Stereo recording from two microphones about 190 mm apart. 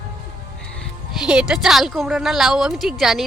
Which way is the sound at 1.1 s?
5° right (ahead or behind).